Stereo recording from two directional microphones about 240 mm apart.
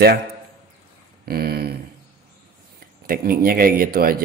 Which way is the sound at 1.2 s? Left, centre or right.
Right.